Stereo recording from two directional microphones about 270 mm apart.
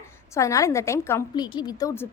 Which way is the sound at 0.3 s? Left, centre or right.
Centre.